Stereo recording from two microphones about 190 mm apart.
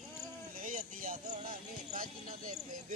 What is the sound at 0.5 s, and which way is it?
Speech, 45° right (ahead or behind).